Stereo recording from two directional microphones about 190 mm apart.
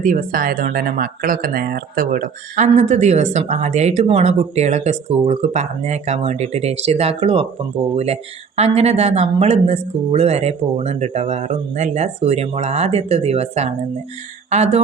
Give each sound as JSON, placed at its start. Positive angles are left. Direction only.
{"t": 0.0, "sound": "speech", "side_deg": -45}